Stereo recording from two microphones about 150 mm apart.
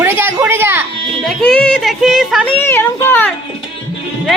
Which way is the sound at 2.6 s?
15° left (ahead or behind).